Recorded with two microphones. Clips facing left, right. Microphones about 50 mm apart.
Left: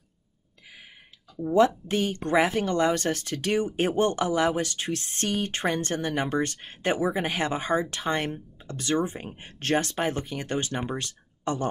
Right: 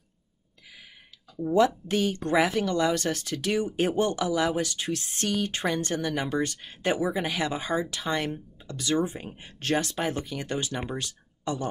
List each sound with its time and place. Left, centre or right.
1.4 s speech: centre
1.9 s speech: left
7.0 s speech: left
7.2 s speech: left